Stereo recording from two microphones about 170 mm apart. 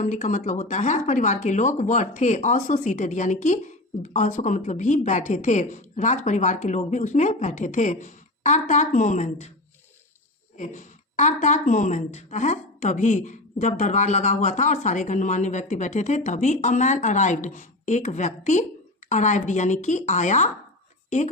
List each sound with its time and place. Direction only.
0.0 s speech: 45° left (ahead or behind)
10.6 s speech: 45° left (ahead or behind)